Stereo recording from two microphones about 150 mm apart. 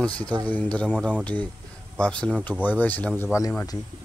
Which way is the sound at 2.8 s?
10° left (ahead or behind).